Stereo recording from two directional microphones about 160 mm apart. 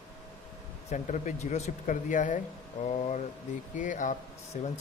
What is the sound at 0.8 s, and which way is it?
Speech, 50° left (ahead or behind).